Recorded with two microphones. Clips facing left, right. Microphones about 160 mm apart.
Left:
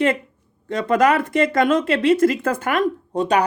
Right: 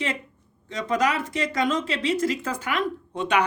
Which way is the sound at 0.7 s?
55° left (ahead or behind).